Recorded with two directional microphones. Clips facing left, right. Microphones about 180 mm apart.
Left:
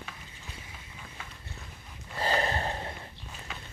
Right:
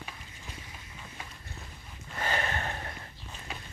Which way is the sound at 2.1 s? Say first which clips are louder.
Left 4 dB; 35° left (ahead or behind).